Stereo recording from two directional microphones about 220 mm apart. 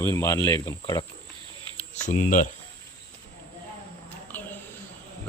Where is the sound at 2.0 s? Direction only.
35° left (ahead or behind).